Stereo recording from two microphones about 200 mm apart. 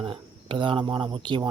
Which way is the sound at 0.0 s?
25° right (ahead or behind).